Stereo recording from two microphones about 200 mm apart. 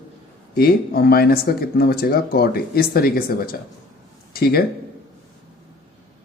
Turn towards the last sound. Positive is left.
turn(degrees=50)  # may be behind; listen again after turning